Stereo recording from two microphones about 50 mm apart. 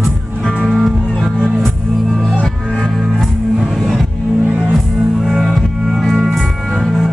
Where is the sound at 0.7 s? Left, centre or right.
Centre.